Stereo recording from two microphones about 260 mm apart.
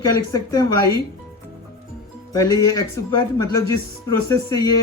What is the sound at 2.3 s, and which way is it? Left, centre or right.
Speech, centre.